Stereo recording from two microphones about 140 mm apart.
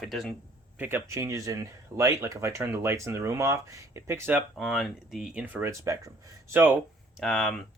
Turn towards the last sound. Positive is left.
turn(degrees=0)  # may be behind; listen again after turning